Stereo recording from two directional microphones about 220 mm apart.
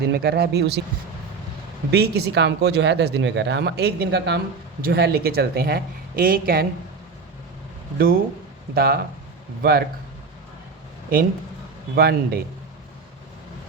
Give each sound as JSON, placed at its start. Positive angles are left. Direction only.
{"t": 0.0, "sound": "speech", "side_deg": -50}
{"t": 1.9, "sound": "speech", "side_deg": -45}
{"t": 7.9, "sound": "speech", "side_deg": -40}
{"t": 11.9, "sound": "speech", "side_deg": -45}